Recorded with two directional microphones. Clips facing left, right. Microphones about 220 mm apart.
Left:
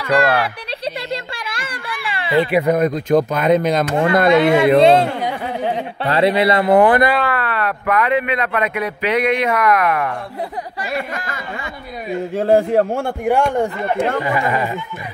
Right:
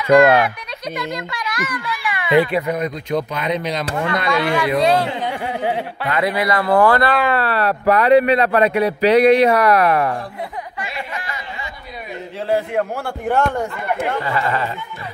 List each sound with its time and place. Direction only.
0.1 s speech: 30° left (ahead or behind)
2.6 s speech: 45° left (ahead or behind)
4.3 s speech: 25° left (ahead or behind)
5.3 s a sound: 10° right (ahead or behind)
6.0 s speech: 30° left (ahead or behind)
7.2 s speech: 30° right (ahead or behind)
11.0 s speech: 50° left (ahead or behind)
13.2 s speech: 10° left (ahead or behind)